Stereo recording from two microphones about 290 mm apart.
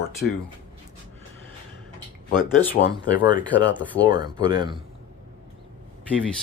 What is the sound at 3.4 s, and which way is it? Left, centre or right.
Speech, centre.